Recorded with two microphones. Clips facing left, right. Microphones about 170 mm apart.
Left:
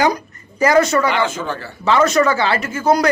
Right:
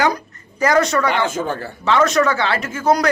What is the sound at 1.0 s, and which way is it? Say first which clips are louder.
Speech: even; 45° right (ahead or behind).